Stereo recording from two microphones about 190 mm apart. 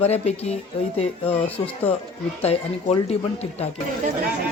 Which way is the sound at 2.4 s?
30° left (ahead or behind).